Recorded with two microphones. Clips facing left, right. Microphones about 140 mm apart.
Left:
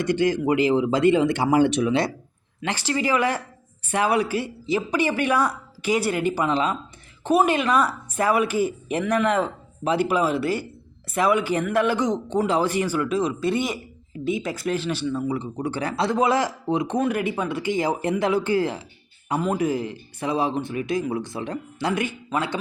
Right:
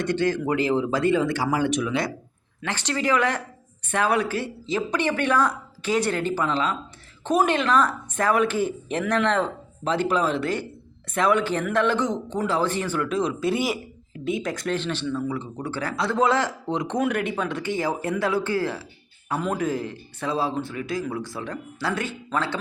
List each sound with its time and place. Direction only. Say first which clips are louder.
0.0 s speech: left 2 dB; 15° left (ahead or behind); by 2.0 s 30° left (ahead or behind)
2.6 s speech: left 2 dB; 10° left (ahead or behind)
7.3 s speech: left 1 dB; 10° left (ahead or behind)
19.4 s speech: left 2 dB; 5° left (ahead or behind)